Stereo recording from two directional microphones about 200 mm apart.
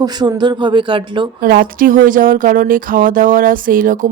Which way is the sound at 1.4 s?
45° right (ahead or behind).